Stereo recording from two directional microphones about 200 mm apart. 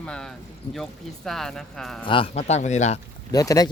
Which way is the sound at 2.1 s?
30° left (ahead or behind).